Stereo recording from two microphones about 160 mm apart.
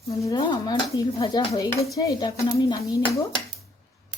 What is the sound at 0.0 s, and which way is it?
Speech, 20° left (ahead or behind).